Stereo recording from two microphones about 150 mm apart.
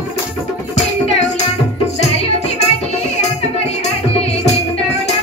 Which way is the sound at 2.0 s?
45° left (ahead or behind).